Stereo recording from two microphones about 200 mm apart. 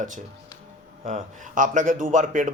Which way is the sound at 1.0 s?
40° right (ahead or behind).